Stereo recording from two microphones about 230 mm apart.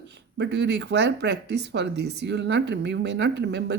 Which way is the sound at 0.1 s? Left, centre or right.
Right.